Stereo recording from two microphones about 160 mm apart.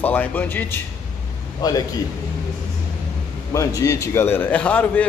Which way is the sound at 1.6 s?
25° left (ahead or behind).